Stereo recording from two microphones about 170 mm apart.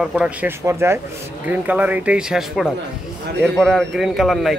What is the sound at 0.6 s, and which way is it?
Speech, 15° right (ahead or behind).